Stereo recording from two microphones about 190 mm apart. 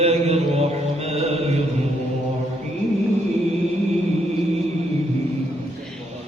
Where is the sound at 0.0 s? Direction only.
35° right (ahead or behind).